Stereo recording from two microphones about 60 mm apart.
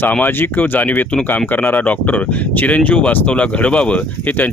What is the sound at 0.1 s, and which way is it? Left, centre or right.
Speech, left.